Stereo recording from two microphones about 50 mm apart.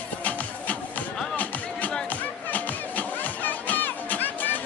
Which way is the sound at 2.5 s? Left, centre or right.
Left.